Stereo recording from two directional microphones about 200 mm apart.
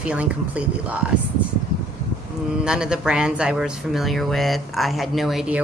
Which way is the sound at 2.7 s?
5° right (ahead or behind).